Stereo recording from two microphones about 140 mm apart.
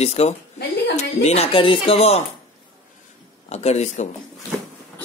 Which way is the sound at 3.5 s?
50° left (ahead or behind).